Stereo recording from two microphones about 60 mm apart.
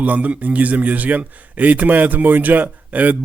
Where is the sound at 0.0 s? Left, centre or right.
Right.